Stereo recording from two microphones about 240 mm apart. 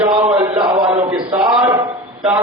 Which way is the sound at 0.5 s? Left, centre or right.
Centre.